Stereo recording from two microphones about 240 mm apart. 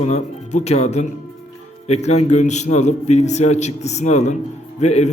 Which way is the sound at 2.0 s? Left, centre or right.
Left.